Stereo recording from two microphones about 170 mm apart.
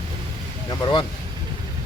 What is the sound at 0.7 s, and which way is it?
Speech, 30° left (ahead or behind).